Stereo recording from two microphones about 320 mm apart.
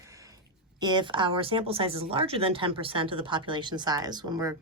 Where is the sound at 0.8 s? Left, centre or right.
Centre.